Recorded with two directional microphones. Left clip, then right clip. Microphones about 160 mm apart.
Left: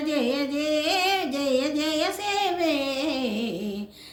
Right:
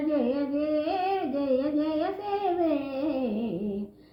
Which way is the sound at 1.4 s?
15° left (ahead or behind).